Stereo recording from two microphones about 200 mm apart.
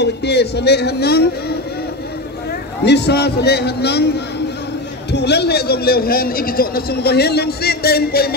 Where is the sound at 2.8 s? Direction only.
55° left (ahead or behind).